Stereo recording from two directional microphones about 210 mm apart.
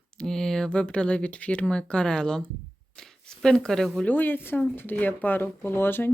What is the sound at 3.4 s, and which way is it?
Speech, 5° left (ahead or behind).